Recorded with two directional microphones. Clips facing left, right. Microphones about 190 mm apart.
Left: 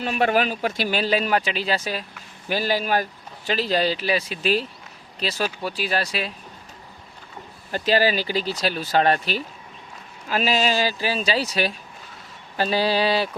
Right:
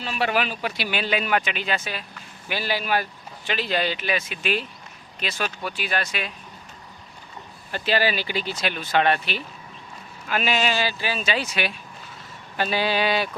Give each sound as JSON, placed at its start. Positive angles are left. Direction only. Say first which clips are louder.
{"t": 0.0, "sound": "speech", "louder": "left 4 dB", "side_deg": 50}
{"t": 7.7, "sound": "speech", "louder": "left 3 dB", "side_deg": 40}